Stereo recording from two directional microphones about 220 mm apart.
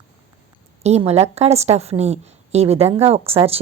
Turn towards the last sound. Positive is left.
turn(degrees=-25)  # may be behind; listen again after turning